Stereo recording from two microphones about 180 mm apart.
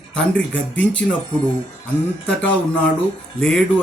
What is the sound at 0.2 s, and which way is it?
Speech, 10° left (ahead or behind).